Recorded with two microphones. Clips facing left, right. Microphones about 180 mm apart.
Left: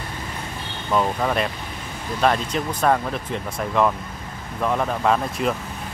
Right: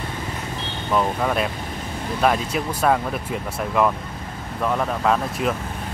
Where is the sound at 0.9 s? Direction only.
Centre (ahead or behind).